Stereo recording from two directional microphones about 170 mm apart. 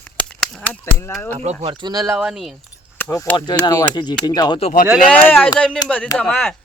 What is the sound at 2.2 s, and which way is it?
Speech, 5° right (ahead or behind).